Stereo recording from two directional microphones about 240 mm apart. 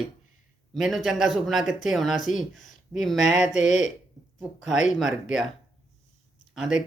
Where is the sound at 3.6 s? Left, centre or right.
Left.